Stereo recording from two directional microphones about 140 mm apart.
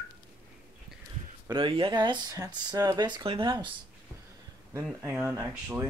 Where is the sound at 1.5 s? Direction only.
35° right (ahead or behind).